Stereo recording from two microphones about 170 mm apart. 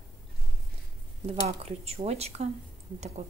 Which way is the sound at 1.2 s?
35° right (ahead or behind).